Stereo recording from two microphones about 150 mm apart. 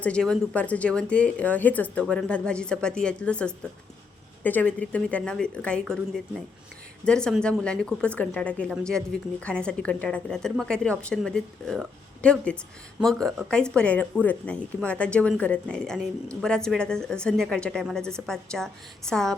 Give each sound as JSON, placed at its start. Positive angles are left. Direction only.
{"t": 0.0, "sound": "speech", "side_deg": 5}
{"t": 7.0, "sound": "a woman's voice", "side_deg": 5}